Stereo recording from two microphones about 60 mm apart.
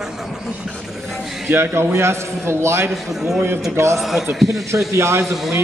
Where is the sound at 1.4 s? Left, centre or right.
Right.